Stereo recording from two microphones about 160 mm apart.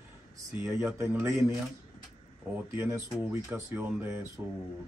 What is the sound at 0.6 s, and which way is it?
Speech, 15° right (ahead or behind).